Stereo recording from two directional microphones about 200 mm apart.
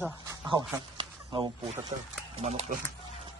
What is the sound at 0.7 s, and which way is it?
Speech, 25° right (ahead or behind).